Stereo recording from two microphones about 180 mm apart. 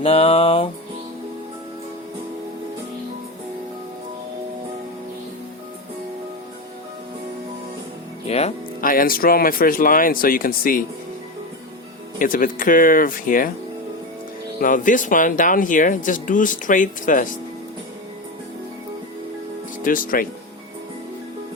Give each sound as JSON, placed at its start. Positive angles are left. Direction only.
{"t": 0.0, "sound": "music", "side_deg": 35}
{"t": 8.3, "sound": "speech", "side_deg": 35}
{"t": 8.8, "sound": "speech", "side_deg": 50}
{"t": 12.2, "sound": "speech", "side_deg": 50}
{"t": 14.6, "sound": "speech", "side_deg": 45}
{"t": 19.8, "sound": "speech", "side_deg": 50}